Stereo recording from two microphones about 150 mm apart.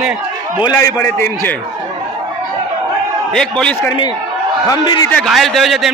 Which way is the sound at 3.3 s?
5° left (ahead or behind).